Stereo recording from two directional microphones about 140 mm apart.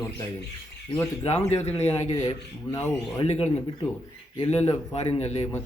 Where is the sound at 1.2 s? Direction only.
50° left (ahead or behind).